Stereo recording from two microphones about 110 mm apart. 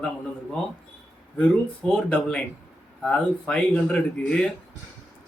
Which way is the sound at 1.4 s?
10° left (ahead or behind).